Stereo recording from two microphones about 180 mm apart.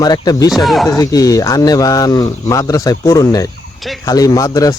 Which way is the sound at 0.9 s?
20° left (ahead or behind).